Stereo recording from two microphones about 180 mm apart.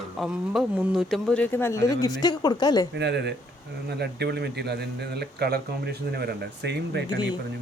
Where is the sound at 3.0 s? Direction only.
75° right (ahead or behind).